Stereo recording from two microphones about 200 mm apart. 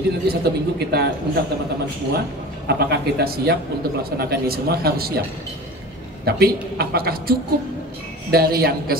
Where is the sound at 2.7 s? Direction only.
55° right (ahead or behind).